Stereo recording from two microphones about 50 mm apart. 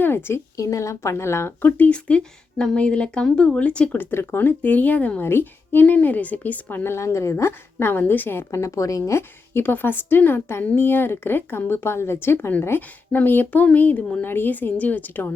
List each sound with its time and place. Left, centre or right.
0.0 s a woman's voice: left
0.5 s speech: left
1.2 s speech: left
1.9 s speech: left
3.9 s a woman's voice: left
5.2 s speech: left
5.8 s a woman's voice: left
6.9 s a woman's voice: left
7.9 s speech: left
8.4 s speech: left
9.6 s speech: left
13.1 s a woman's voice: left